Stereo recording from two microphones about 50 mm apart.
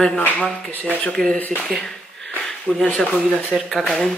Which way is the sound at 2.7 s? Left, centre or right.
Left.